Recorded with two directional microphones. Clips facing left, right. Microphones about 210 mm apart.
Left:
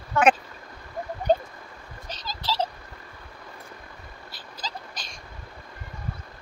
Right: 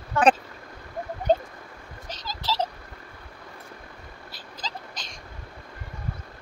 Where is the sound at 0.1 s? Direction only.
35° right (ahead or behind).